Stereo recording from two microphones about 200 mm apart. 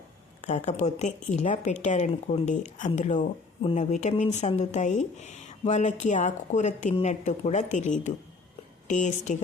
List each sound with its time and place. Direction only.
0.4 s a woman's voice: 35° left (ahead or behind)